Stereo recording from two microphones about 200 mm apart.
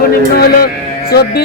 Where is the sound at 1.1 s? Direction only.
50° left (ahead or behind).